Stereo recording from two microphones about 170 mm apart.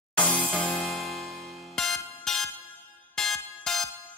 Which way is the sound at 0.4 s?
5° left (ahead or behind).